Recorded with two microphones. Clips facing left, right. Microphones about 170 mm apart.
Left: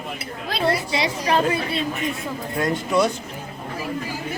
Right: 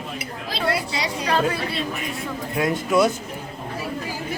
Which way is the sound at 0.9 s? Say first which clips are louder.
Left 2 dB; 25° left (ahead or behind).